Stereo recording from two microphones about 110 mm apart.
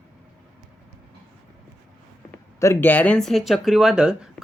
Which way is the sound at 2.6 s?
25° left (ahead or behind).